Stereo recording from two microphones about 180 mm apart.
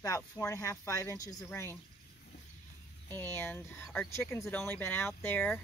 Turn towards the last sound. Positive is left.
turn(degrees=10)  # may be behind; listen again after turning